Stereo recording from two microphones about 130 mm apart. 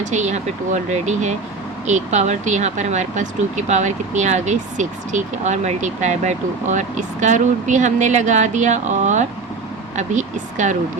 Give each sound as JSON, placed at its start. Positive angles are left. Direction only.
{"t": 0.0, "sound": "speech", "side_deg": -65}